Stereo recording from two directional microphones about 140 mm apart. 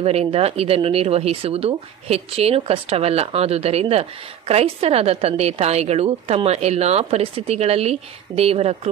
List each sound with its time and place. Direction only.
0.0 s speech: 45° right (ahead or behind)